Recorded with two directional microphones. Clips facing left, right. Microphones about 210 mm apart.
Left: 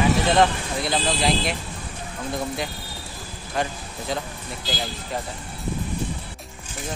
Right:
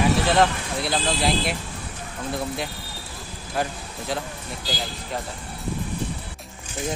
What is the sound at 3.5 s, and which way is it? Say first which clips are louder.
Speech: even; centre (ahead or behind).